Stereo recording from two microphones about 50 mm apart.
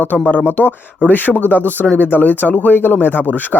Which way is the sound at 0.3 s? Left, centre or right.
Left.